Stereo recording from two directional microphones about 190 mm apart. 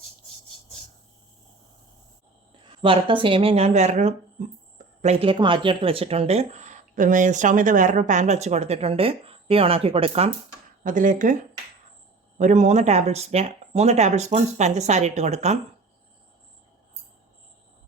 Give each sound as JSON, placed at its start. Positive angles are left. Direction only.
{"t": 2.8, "sound": "speech", "side_deg": -25}
{"t": 10.8, "sound": "speech", "side_deg": -45}
{"t": 12.4, "sound": "speech", "side_deg": -40}